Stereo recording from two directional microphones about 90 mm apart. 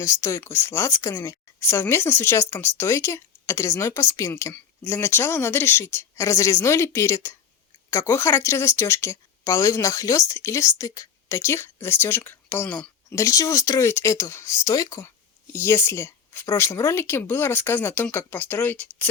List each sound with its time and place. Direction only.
0.0 s speech: 35° left (ahead or behind); by 12.9 s 15° left (ahead or behind)
13.1 s speech: 35° left (ahead or behind)
15.5 s speech: 30° left (ahead or behind)